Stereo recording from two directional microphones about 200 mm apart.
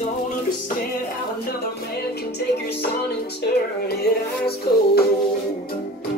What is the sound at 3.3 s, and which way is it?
Music, 55° left (ahead or behind).